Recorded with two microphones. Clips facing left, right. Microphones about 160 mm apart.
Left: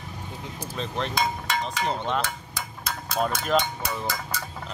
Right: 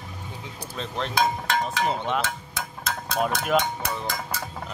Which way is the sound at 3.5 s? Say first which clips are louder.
Right 1 dB; 5° right (ahead or behind).